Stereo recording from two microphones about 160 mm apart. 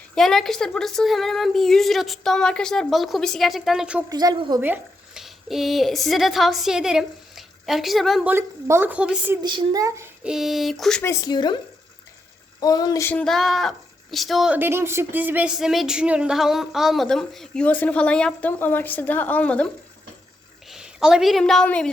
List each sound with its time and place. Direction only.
0.2 s speech: centre (ahead or behind)
4.1 s a child's voice: 25° right (ahead or behind)
4.6 s speech: 5° right (ahead or behind)
8.3 s a woman's voice: 15° right (ahead or behind)
9.4 s a child's voice: 30° right (ahead or behind)
10.2 s speech: centre (ahead or behind)
11.0 s speech: 25° left (ahead or behind)
12.5 s speech: 25° left (ahead or behind)
13.1 s speech: 5° left (ahead or behind)
20.7 s a woman's voice: 5° right (ahead or behind)